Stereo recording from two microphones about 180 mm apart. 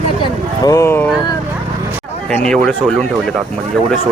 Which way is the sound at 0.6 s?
15° left (ahead or behind).